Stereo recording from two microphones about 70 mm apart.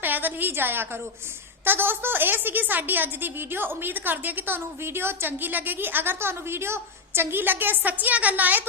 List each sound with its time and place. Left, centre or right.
0.0 s a woman's voice: right